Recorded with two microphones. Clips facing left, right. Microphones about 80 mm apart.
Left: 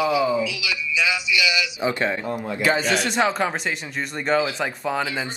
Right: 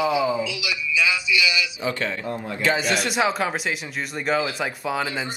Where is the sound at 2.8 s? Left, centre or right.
Left.